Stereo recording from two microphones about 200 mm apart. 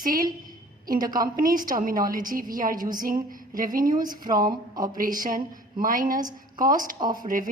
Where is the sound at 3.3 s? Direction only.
45° right (ahead or behind).